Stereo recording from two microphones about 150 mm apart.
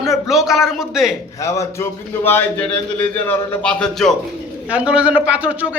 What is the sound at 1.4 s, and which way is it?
A man's voice, 20° left (ahead or behind).